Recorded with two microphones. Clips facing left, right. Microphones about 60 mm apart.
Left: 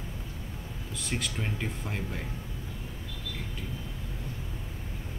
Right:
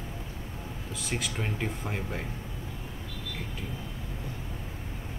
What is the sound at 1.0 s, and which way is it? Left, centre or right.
Speech, centre.